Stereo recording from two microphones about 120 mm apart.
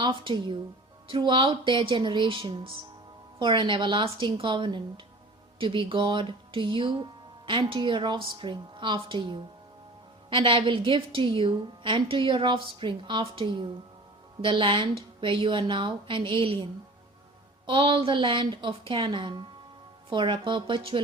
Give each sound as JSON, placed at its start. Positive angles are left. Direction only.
{"t": 0.0, "sound": "a woman's voice", "side_deg": -45}
{"t": 17.7, "sound": "speech", "side_deg": -45}